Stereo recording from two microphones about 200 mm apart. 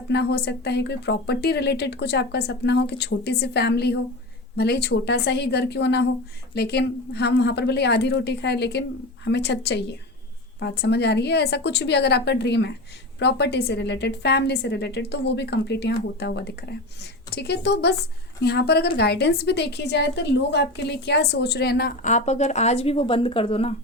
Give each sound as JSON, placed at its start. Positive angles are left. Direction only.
{"t": 0.1, "sound": "a woman's voice", "side_deg": 55}